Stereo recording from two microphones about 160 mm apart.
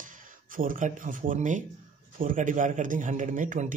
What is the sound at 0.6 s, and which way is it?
Speech, 55° right (ahead or behind).